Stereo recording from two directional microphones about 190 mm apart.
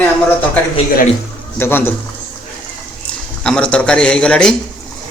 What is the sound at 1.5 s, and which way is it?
Speech, 10° left (ahead or behind).